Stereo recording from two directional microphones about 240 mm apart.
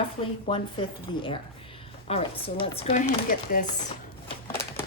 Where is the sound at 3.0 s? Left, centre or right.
Left.